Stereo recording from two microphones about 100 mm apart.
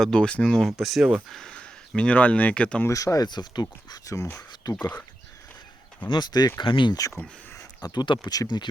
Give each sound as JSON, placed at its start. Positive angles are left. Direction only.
{"t": 0.0, "sound": "speech", "side_deg": 10}
{"t": 1.3, "sound": "speech", "side_deg": 5}
{"t": 2.8, "sound": "speech", "side_deg": 35}
{"t": 4.7, "sound": "speech", "side_deg": 45}
{"t": 6.1, "sound": "speech", "side_deg": 45}
{"t": 7.9, "sound": "speech", "side_deg": 55}
{"t": 8.3, "sound": "speech", "side_deg": 45}